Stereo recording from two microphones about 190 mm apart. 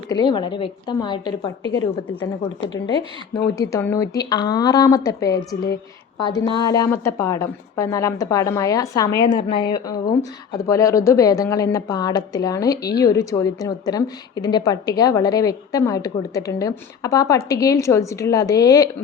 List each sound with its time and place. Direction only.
0.1 s a woman's voice: 20° left (ahead or behind)